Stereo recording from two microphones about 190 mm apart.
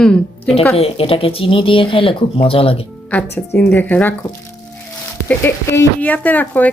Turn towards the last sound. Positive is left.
turn(degrees=10)  # may be behind; listen again after turning